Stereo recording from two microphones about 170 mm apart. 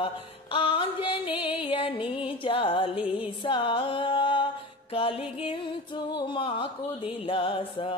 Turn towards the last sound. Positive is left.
turn(degrees=30)  # may be behind; listen again after turning